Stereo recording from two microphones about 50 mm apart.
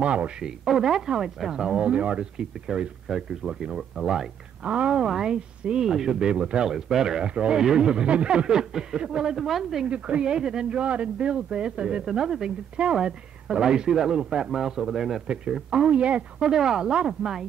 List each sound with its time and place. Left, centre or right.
0.0 s speech: right
0.4 s speech: centre
4.6 s speech: right
4.9 s speech: centre
9.8 s speech: right; by 15.2 s centre
15.2 s speech: centre
16.4 s speech: centre